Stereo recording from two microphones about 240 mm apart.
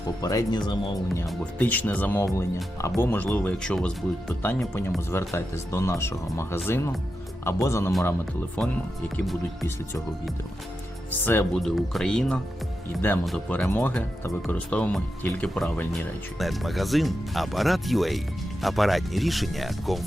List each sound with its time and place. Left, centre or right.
0.2 s speech: centre
11.3 s speech: centre